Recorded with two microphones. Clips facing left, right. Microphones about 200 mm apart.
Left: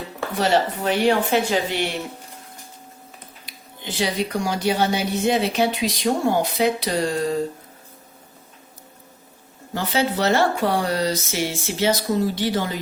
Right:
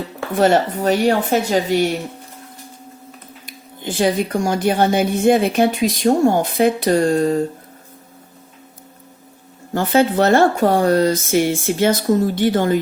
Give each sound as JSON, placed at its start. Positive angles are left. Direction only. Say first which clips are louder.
{"t": 0.3, "sound": "speech", "louder": "right 5 dB", "side_deg": -50}
{"t": 3.4, "sound": "speech", "louder": "right 7 dB", "side_deg": -50}
{"t": 9.7, "sound": "speech", "louder": "right 7 dB", "side_deg": -50}